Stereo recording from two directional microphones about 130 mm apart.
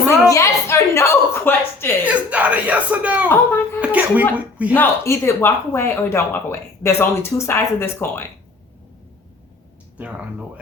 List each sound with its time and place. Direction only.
0.3 s a woman's voice: 25° left (ahead or behind)
2.0 s speech: 10° right (ahead or behind)
3.2 s speech: 20° left (ahead or behind)
3.8 s speech: 10° right (ahead or behind)
4.7 s speech: 20° left (ahead or behind)
10.0 s speech: 10° right (ahead or behind)